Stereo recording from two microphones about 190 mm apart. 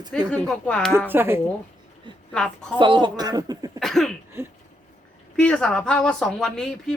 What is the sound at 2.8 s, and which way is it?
Speech, 25° right (ahead or behind).